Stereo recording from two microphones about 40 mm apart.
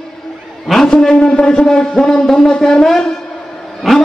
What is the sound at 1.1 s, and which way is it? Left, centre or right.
A man's voice, left.